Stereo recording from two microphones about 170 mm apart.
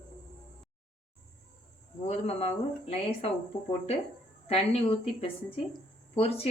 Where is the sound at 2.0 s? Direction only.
40° left (ahead or behind).